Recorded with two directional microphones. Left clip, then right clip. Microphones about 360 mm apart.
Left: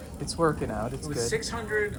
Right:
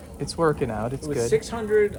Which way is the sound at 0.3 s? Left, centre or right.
Right.